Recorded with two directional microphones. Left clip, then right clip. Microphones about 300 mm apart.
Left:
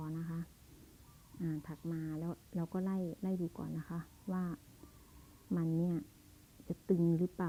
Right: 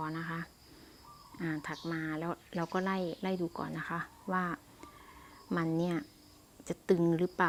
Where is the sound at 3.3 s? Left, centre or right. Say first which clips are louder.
Right 6 dB; right.